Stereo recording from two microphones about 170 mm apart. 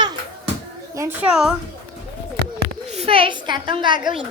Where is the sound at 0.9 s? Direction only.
10° right (ahead or behind).